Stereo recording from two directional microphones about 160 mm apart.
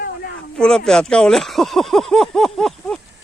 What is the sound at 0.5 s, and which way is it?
Speech, 5° left (ahead or behind).